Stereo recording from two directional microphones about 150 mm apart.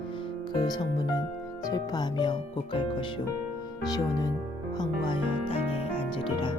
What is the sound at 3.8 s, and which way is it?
Speech, 25° left (ahead or behind).